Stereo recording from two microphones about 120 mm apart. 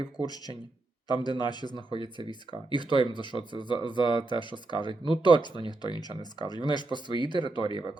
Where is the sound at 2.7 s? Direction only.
40° left (ahead or behind).